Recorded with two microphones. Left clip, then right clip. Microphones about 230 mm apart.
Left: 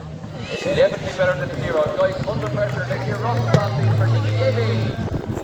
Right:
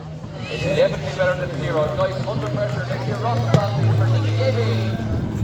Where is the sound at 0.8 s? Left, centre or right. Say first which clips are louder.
Left 2 dB; left.